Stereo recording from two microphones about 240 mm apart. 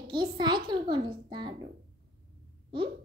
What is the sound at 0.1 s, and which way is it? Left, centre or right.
A child's voice, centre.